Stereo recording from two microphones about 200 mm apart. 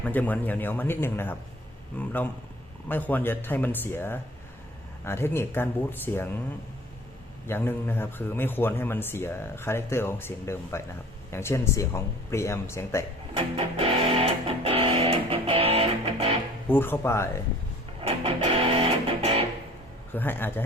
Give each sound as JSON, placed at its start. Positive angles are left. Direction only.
{"t": 0.0, "sound": "a man's voice", "side_deg": 10}
{"t": 7.4, "sound": "a man's voice", "side_deg": 10}
{"t": 13.3, "sound": "music", "side_deg": -30}
{"t": 16.6, "sound": "a man's voice", "side_deg": 10}
{"t": 18.0, "sound": "music", "side_deg": -30}
{"t": 20.1, "sound": "a man's voice", "side_deg": 10}